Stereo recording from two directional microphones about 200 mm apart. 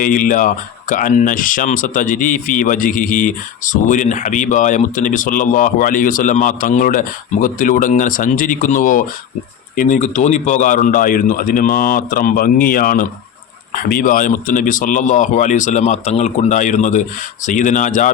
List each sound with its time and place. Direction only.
0.0 s speech: 45° left (ahead or behind)